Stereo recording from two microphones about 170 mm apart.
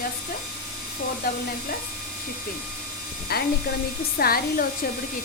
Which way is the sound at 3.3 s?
65° left (ahead or behind).